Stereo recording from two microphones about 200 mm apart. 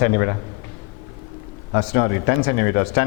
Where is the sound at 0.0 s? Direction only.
20° left (ahead or behind).